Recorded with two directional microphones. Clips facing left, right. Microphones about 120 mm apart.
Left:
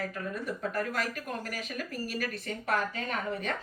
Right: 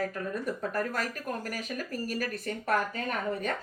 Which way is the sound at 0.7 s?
45° right (ahead or behind).